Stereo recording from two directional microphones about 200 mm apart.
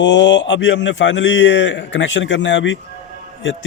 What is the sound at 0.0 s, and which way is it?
A man's voice, 65° left (ahead or behind).